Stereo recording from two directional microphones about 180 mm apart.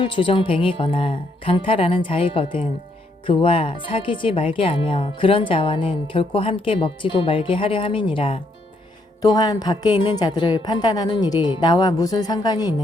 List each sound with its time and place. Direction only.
0.0 s speech: 30° left (ahead or behind)